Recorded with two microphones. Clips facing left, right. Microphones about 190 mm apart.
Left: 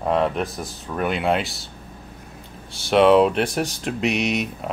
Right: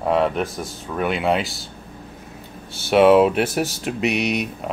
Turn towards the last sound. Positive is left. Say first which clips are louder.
# right 1 dB
turn(degrees=0)  # may be behind; listen again after turning